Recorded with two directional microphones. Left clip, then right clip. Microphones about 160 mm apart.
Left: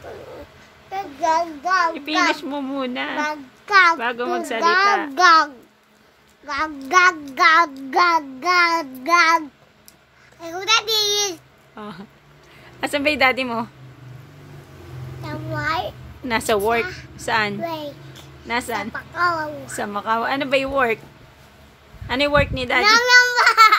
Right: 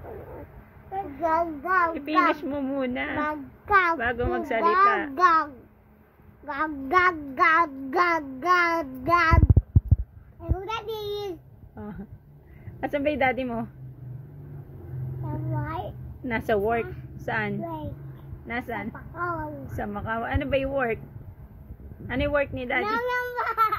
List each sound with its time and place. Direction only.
1.2 s child singing: 5° right (ahead or behind)
2.0 s a child's voice: 15° left (ahead or behind); by 5.5 s 35° left (ahead or behind)
6.4 s a child's voice: 15° left (ahead or behind)
11.1 s babbling: 25° left (ahead or behind)
12.8 s a child's voice: 25° left (ahead or behind)
16.3 s a child's voice: 25° left (ahead or behind)
18.9 s a child's voice: 40° left (ahead or behind)
22.0 s a child's voice: 25° left (ahead or behind)
22.9 s baby cry: 90° left